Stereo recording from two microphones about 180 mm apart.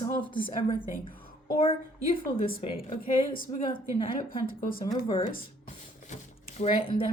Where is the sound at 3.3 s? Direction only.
50° left (ahead or behind).